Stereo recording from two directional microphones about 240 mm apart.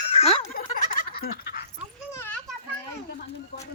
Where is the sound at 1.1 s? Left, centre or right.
Left.